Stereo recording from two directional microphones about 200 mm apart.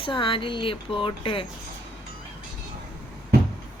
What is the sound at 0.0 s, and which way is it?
Speech, 25° left (ahead or behind).